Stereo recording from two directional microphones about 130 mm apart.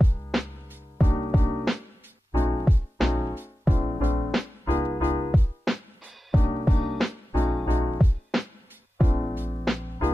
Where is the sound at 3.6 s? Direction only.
15° right (ahead or behind).